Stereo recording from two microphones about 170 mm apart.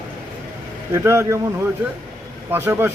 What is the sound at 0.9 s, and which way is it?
A man's voice, 15° right (ahead or behind).